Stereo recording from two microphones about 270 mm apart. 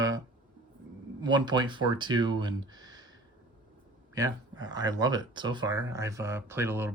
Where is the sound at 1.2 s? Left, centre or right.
Centre.